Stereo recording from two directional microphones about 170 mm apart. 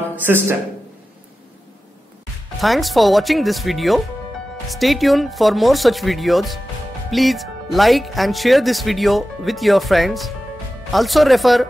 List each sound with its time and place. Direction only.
0.2 s speech: 10° right (ahead or behind)
2.6 s speech: centre (ahead or behind)